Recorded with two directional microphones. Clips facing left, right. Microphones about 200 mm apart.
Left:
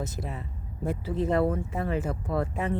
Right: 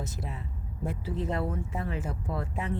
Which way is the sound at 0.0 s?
45° left (ahead or behind).